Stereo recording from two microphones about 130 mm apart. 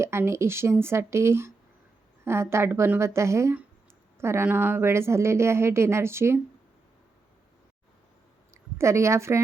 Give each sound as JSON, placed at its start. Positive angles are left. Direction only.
{"t": 0.0, "sound": "a woman's voice", "side_deg": -20}
{"t": 8.8, "sound": "a woman's voice", "side_deg": -20}